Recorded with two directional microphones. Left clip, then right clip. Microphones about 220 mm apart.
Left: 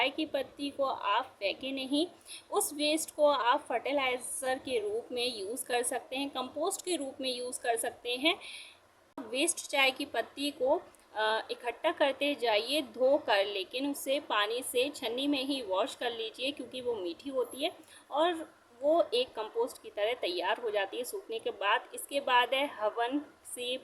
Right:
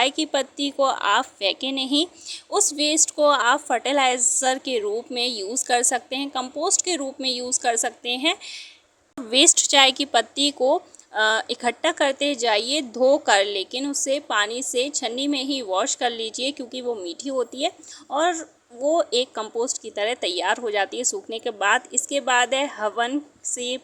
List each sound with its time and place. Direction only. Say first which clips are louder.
0.0 s a woman's voice: right 10 dB; 35° right (ahead or behind)